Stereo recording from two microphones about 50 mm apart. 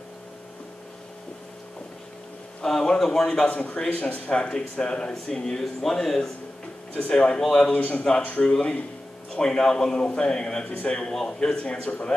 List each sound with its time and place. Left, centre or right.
2.6 s a man's voice: centre
3.5 s a man's voice: left; by 6.3 s centre
7.0 s a man's voice: centre
7.7 s a man's voice: left